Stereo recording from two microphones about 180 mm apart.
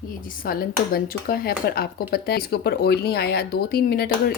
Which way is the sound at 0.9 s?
55° left (ahead or behind).